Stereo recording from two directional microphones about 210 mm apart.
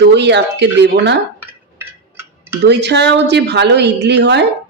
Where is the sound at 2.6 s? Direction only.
55° right (ahead or behind).